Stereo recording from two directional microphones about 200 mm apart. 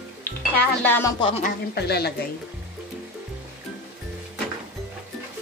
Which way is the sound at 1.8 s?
55° left (ahead or behind).